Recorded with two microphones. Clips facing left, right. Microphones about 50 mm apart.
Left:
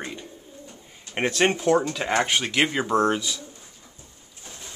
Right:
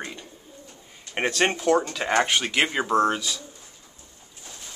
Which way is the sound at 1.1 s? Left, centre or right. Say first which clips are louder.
Left 1 dB; centre.